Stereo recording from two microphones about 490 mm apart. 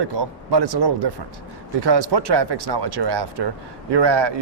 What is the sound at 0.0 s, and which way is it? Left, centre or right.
A man's voice, right.